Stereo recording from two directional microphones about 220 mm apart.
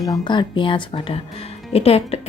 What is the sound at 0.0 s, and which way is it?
A woman's voice, 20° left (ahead or behind).